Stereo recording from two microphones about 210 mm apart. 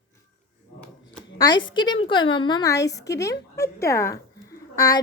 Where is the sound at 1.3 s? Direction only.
15° left (ahead or behind).